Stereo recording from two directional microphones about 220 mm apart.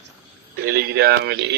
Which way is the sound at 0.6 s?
45° right (ahead or behind).